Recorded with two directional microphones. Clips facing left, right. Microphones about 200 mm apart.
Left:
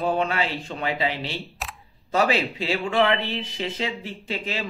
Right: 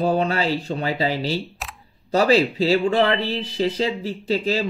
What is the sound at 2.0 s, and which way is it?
Speech, 35° right (ahead or behind).